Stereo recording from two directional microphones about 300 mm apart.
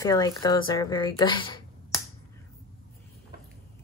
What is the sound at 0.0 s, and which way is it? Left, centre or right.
A woman's voice, centre.